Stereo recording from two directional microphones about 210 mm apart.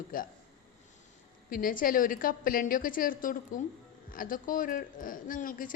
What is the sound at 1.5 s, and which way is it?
A woman's voice, 40° left (ahead or behind).